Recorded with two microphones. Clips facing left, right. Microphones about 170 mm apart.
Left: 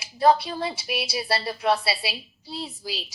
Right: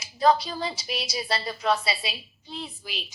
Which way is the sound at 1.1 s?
30° left (ahead or behind).